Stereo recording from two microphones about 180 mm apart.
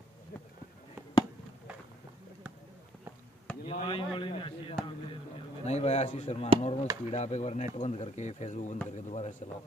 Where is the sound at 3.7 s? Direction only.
30° left (ahead or behind).